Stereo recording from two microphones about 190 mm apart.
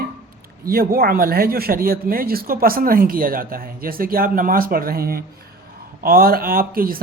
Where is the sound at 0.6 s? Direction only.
50° right (ahead or behind).